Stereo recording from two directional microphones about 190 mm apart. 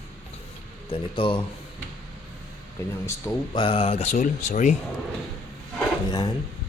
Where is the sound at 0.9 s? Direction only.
25° left (ahead or behind).